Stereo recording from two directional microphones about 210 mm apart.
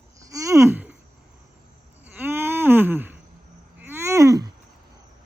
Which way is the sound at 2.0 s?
10° right (ahead or behind).